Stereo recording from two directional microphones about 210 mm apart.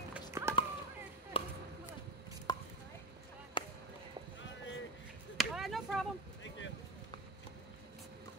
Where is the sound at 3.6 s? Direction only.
25° left (ahead or behind).